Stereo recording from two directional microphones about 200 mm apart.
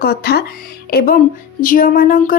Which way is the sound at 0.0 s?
50° left (ahead or behind).